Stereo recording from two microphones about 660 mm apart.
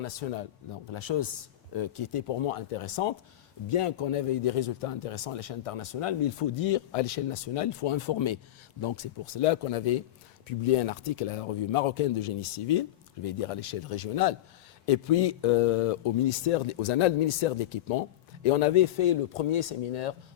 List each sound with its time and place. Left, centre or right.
0.0 s speech: left
0.9 s speech: left